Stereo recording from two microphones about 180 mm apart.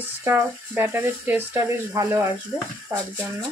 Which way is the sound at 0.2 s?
10° right (ahead or behind).